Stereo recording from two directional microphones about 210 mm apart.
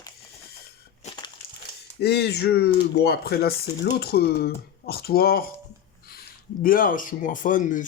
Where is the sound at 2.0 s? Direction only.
50° left (ahead or behind).